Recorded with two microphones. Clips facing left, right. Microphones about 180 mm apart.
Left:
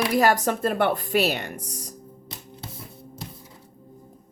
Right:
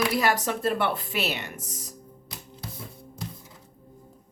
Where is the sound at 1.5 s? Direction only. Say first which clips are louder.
Left 4 dB; centre (ahead or behind).